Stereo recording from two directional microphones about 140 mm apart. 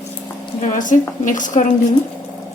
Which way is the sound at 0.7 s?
65° left (ahead or behind).